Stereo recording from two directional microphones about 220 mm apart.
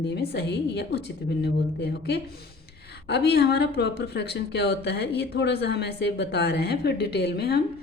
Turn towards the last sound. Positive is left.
turn(degrees=45)  # may be behind; listen again after turning